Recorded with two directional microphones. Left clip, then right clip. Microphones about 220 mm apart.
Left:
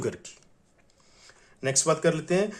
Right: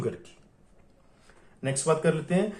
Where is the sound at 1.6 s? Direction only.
45° left (ahead or behind).